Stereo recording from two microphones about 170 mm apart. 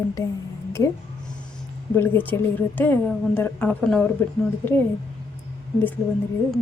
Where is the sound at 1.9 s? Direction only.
10° left (ahead or behind).